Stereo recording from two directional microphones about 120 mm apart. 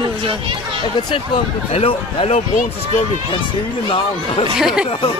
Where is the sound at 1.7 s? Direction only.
60° left (ahead or behind).